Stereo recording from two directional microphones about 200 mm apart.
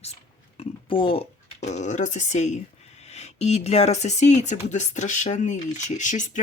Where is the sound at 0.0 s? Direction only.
30° left (ahead or behind).